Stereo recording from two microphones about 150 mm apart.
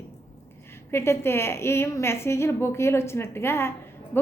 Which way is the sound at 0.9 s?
15° left (ahead or behind).